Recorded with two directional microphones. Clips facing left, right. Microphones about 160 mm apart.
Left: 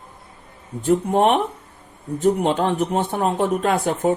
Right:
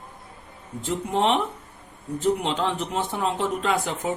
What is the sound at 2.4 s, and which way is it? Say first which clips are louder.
Speech: left 6 dB; 50° left (ahead or behind).